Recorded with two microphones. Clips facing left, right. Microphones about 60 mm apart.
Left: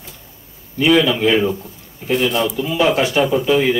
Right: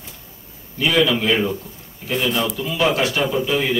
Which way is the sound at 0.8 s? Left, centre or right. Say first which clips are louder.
Left 4 dB; centre.